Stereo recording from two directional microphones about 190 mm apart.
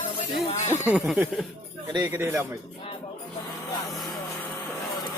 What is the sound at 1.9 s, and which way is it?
Speech, 15° right (ahead or behind).